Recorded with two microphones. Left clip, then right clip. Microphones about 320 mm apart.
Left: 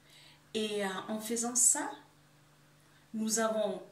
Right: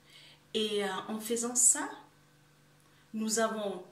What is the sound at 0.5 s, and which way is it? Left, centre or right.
Speech, centre.